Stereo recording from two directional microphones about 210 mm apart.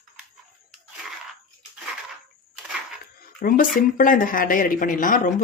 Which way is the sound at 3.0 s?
40° left (ahead or behind).